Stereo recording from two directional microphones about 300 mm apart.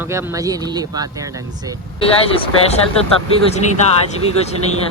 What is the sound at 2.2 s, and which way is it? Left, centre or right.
Speech, centre.